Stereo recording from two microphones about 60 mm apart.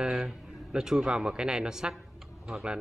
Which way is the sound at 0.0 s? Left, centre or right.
Centre.